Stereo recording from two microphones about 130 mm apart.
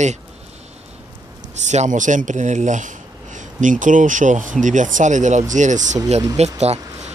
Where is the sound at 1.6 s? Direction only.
65° right (ahead or behind).